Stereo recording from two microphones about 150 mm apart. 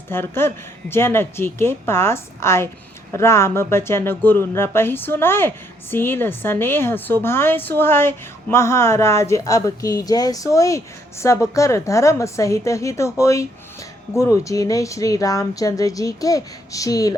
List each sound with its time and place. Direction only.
0.1 s speech: 15° left (ahead or behind)